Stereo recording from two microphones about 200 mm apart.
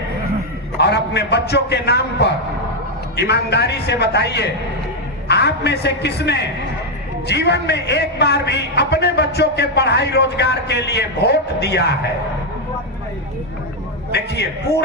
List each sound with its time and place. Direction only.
0.8 s a man's voice: 55° left (ahead or behind)
14.1 s a man's voice: 55° left (ahead or behind)